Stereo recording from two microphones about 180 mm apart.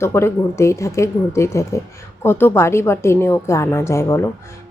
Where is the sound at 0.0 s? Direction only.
15° left (ahead or behind).